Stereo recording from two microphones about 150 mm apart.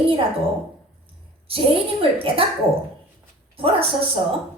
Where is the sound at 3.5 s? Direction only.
40° right (ahead or behind).